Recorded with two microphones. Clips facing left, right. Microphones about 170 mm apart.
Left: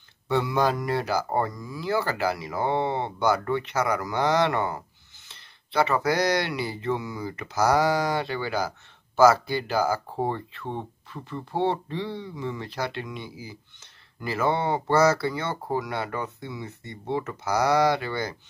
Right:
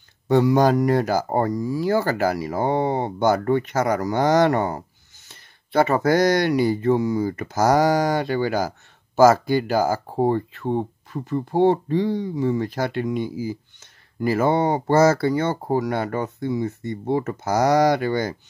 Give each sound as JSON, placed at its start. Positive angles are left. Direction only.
{"t": 0.3, "sound": "speech", "side_deg": -45}